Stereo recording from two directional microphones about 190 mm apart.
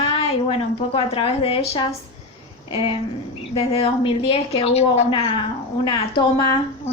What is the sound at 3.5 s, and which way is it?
A woman's voice, 30° left (ahead or behind).